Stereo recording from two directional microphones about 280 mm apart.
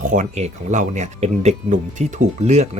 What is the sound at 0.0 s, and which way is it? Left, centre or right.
Speech, right.